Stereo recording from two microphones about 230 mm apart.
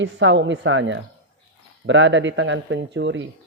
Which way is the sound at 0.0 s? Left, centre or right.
Right.